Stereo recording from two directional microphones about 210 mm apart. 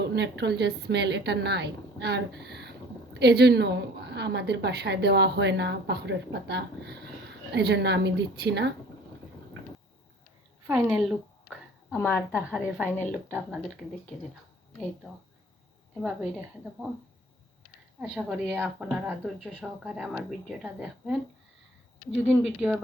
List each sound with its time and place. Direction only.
0.0 s a woman's voice: 55° right (ahead or behind)
10.7 s speech: 5° right (ahead or behind)
11.9 s a woman's voice: 10° left (ahead or behind)
12.5 s speech: 5° right (ahead or behind)
16.0 s speech: centre (ahead or behind)
18.0 s speech: 5° right (ahead or behind)